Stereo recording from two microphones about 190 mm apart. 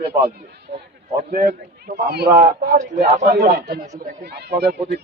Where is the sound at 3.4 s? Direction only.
60° right (ahead or behind).